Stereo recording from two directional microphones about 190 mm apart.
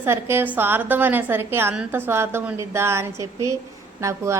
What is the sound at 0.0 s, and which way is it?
A woman's voice, 10° right (ahead or behind).